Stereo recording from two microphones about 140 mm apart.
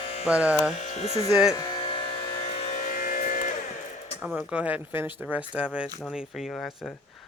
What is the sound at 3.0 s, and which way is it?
Vehicle, 70° left (ahead or behind).